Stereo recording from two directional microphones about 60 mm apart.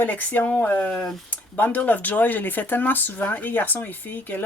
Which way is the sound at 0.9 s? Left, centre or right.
Centre.